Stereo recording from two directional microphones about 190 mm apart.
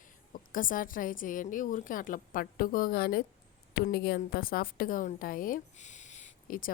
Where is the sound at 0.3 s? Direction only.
45° left (ahead or behind).